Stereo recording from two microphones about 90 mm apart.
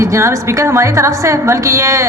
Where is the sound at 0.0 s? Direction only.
30° right (ahead or behind).